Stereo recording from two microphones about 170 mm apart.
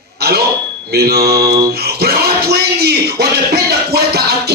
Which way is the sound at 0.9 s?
65° right (ahead or behind).